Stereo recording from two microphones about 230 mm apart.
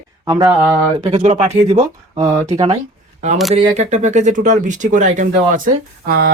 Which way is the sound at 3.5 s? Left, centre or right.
Right.